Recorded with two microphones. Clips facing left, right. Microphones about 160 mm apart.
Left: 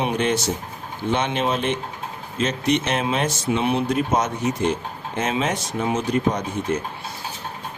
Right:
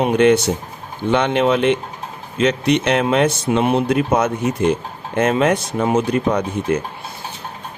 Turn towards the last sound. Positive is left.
turn(degrees=-60)  # may be behind; listen again after turning